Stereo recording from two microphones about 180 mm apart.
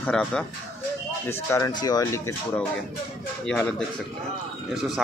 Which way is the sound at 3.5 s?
5° left (ahead or behind).